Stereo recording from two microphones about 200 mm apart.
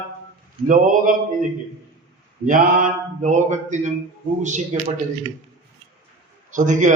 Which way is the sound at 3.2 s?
35° right (ahead or behind).